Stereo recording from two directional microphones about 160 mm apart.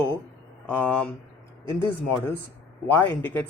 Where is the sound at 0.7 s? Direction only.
10° left (ahead or behind).